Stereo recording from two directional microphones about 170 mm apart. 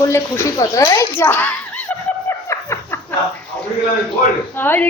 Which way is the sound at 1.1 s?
10° left (ahead or behind).